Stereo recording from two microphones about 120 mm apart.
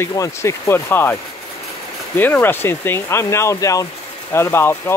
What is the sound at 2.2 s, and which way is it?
Speech, 15° left (ahead or behind).